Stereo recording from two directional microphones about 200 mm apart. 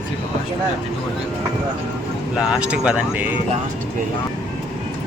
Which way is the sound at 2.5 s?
5° right (ahead or behind).